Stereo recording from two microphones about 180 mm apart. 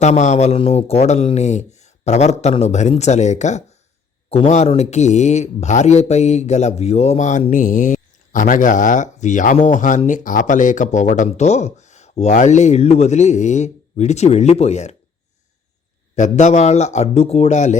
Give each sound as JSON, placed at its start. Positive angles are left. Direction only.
{"t": 0.0, "sound": "speech", "side_deg": 40}
{"t": 16.1, "sound": "speech", "side_deg": 40}